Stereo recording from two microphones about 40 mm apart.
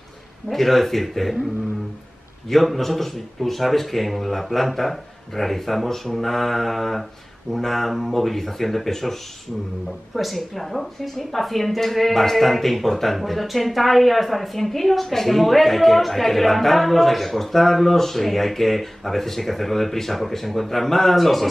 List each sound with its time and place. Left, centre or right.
0.5 s a woman's voice: centre